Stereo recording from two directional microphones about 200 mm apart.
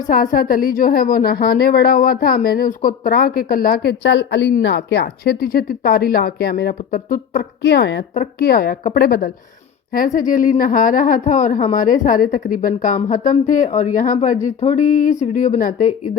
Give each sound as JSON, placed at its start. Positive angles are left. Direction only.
{"t": 0.1, "sound": "a woman's voice", "side_deg": 45}
{"t": 8.1, "sound": "a woman's voice", "side_deg": 45}